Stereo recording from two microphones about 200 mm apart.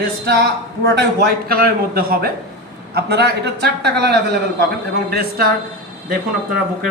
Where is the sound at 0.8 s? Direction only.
55° right (ahead or behind).